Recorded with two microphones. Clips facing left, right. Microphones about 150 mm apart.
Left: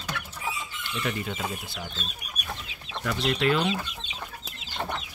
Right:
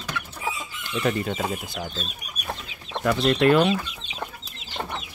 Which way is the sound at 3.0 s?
55° right (ahead or behind).